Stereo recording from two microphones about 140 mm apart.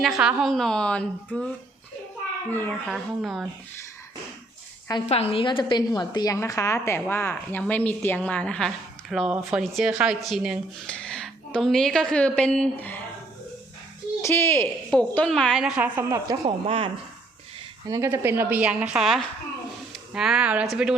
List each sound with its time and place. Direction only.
0.0 s a woman's voice: 5° right (ahead or behind)
2.5 s a woman's voice: 15° left (ahead or behind)
2.8 s a woman's voice: centre (ahead or behind)
5.0 s a woman's voice: 45° left (ahead or behind); by 10.6 s 5° right (ahead or behind)
10.8 s a woman's voice: 10° left (ahead or behind)
14.2 s speech: 20° left (ahead or behind)
14.9 s a woman's voice: 5° left (ahead or behind); by 16.4 s 25° right (ahead or behind)
16.6 s speech: 40° right (ahead or behind)
17.8 s speech: 25° right (ahead or behind)
18.1 s a woman's voice: 15° right (ahead or behind)